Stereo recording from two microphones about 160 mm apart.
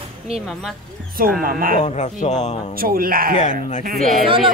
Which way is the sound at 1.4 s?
65° right (ahead or behind).